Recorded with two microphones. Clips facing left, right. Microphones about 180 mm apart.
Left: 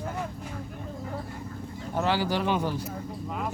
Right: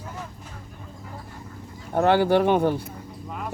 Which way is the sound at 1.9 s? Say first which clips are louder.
Right 8 dB; 55° right (ahead or behind).